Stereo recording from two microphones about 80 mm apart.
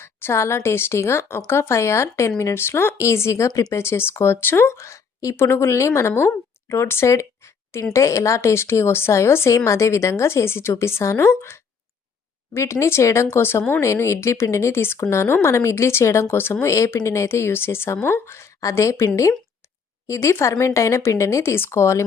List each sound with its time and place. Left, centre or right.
0.0 s speech: left
3.8 s speech: left